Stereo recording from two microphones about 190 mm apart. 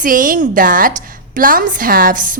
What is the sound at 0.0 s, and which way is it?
Speech, 45° right (ahead or behind).